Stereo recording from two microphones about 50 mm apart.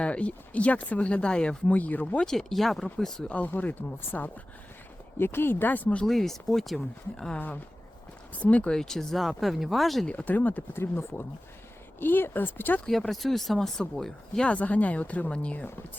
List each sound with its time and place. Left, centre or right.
0.0 s speech: left
1.7 s speech: left
2.2 s speech: centre
3.2 s speech: left
5.1 s speech: left
6.1 s speech: centre
7.3 s speech: left
8.7 s speech: centre
9.2 s speech: centre
10.1 s speech: left
10.8 s speech: left
12.8 s speech: centre
14.4 s speech: left